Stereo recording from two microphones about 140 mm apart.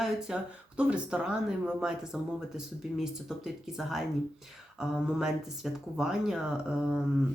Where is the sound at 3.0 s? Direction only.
5° right (ahead or behind).